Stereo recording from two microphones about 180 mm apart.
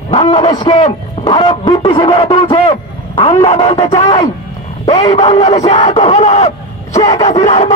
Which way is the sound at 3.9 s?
35° left (ahead or behind).